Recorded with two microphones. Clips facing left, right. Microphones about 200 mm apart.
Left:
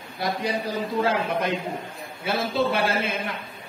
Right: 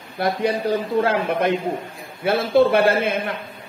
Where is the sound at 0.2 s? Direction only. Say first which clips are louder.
Right 6 dB; 60° right (ahead or behind).